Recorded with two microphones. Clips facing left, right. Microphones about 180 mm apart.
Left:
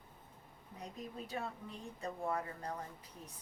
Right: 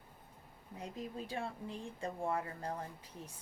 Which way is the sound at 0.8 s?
30° right (ahead or behind).